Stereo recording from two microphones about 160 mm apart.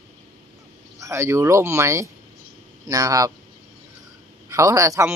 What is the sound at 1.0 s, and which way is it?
A man's voice, 15° right (ahead or behind).